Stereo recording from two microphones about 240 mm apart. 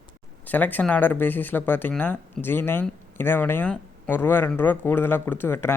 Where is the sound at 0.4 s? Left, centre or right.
Centre.